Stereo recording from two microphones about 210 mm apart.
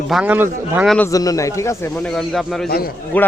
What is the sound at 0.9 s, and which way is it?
Speech, 15° left (ahead or behind).